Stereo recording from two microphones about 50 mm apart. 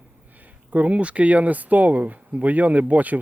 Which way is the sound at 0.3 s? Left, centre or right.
Right.